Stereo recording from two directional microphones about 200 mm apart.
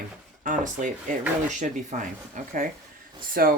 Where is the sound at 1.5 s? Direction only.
35° right (ahead or behind).